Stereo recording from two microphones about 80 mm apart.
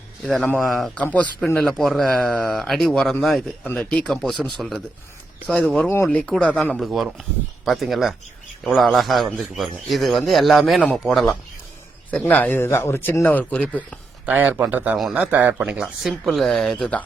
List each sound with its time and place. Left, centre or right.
0.6 s a man's voice: centre
0.9 s speech: centre
1.5 s a man's voice: centre
6.7 s a man's voice: centre
12.1 s a man's voice: centre
12.6 s speech: left
13.5 s speech: centre
14.3 s speech: centre
16.2 s a man's voice: centre
16.6 s speech: centre